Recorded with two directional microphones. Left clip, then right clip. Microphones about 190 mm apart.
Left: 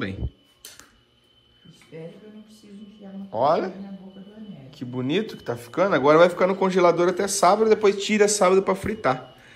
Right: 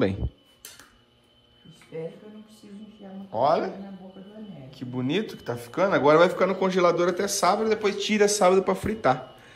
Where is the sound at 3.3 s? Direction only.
10° right (ahead or behind).